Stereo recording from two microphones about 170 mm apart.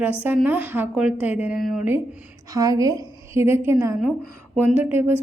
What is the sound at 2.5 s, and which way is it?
A woman's voice, 20° right (ahead or behind).